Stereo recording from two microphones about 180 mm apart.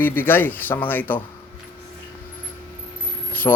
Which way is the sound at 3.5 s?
15° left (ahead or behind).